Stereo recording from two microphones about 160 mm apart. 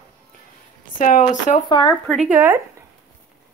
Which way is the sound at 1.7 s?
30° left (ahead or behind).